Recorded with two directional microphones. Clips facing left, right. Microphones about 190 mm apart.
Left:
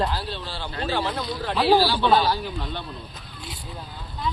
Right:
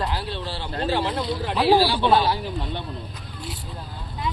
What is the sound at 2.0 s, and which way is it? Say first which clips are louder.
Speech: even; 20° right (ahead or behind).